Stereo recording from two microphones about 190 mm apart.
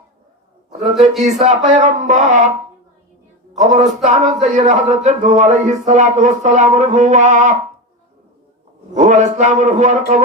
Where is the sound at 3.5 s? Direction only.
40° right (ahead or behind).